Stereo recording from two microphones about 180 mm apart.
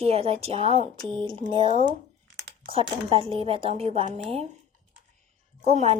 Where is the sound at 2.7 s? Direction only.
30° right (ahead or behind).